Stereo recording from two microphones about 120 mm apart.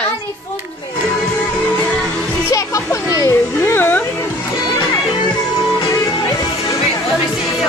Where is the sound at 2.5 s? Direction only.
25° left (ahead or behind).